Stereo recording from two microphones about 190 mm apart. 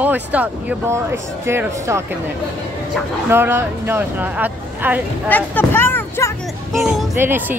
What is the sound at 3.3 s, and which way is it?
Speech, 10° right (ahead or behind).